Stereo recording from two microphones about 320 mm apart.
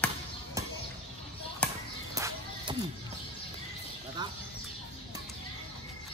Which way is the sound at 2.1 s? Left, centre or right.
Centre.